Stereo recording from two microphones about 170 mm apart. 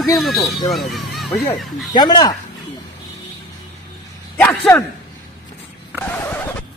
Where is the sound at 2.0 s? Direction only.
25° left (ahead or behind).